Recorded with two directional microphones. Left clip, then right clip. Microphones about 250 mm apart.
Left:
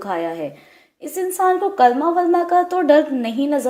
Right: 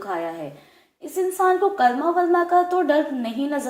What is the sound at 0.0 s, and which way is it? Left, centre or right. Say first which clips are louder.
A woman's voice: left 4 dB; left.